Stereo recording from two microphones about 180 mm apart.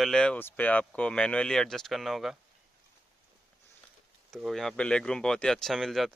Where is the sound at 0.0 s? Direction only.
5° left (ahead or behind).